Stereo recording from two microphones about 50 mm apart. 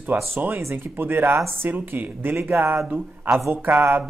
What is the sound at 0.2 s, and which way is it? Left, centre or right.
Speech, right.